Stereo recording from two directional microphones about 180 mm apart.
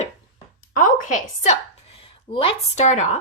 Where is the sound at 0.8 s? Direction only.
45° left (ahead or behind).